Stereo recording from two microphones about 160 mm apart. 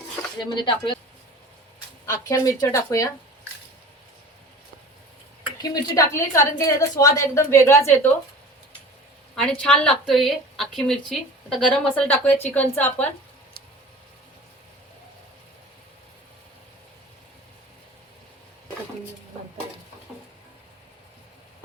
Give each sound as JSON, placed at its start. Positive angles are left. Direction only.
{"t": 0.3, "sound": "a woman's voice", "side_deg": 30}
{"t": 2.0, "sound": "a woman's voice", "side_deg": 20}
{"t": 5.6, "sound": "a woman's voice", "side_deg": 25}
{"t": 9.3, "sound": "a woman's voice", "side_deg": 5}
{"t": 20.1, "sound": "stir", "side_deg": -5}